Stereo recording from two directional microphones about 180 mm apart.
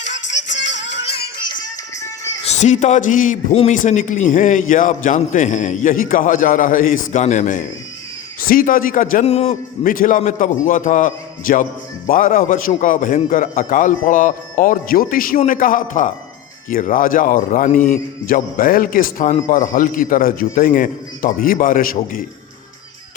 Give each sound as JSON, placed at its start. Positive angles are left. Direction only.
{"t": 0.1, "sound": "music", "side_deg": 85}
{"t": 2.4, "sound": "a man's voice", "side_deg": 40}
{"t": 9.2, "sound": "a man's voice", "side_deg": 35}
{"t": 9.8, "sound": "a man's voice", "side_deg": 50}